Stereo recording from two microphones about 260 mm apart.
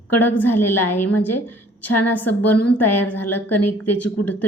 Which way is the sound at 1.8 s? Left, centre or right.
Left.